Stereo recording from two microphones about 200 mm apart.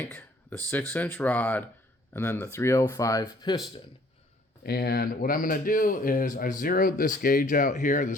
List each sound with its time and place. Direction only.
0.0 s a sound: 10° left (ahead or behind)
0.7 s speech: 10° left (ahead or behind)
4.6 s speech: 50° left (ahead or behind)